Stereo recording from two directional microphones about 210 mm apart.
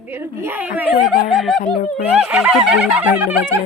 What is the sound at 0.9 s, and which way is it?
Speech, 45° left (ahead or behind).